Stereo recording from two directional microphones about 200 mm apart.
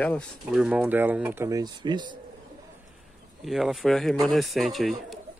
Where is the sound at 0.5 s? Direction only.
5° right (ahead or behind); by 2.1 s 20° right (ahead or behind).